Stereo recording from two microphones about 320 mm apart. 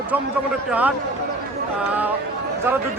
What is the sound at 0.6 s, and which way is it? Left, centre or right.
A man's voice, centre.